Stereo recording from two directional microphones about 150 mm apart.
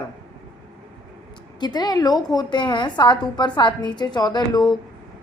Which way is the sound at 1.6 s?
25° left (ahead or behind).